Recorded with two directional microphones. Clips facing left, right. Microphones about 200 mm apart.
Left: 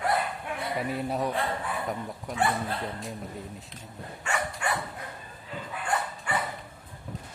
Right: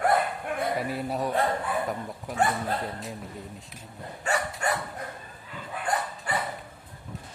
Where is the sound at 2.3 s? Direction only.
5° right (ahead or behind).